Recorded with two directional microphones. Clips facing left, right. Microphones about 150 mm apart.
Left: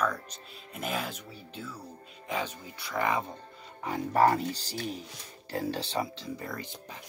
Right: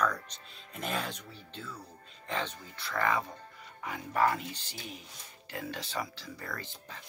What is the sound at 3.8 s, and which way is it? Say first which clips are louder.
Speech: left 5 dB; 35° left (ahead or behind).